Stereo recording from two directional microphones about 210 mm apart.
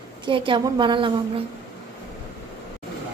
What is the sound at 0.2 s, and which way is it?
Speech, 25° right (ahead or behind).